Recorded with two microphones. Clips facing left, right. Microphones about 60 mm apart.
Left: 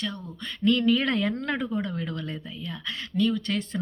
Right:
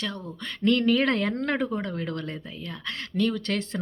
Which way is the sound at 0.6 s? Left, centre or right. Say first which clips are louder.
Right 1 dB; right.